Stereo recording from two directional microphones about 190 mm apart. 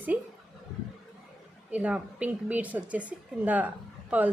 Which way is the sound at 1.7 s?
5° right (ahead or behind).